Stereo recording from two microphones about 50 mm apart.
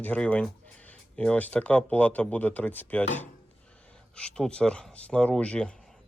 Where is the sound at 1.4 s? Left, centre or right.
Left.